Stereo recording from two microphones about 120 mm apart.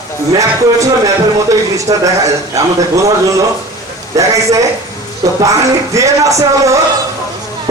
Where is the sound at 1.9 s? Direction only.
25° right (ahead or behind).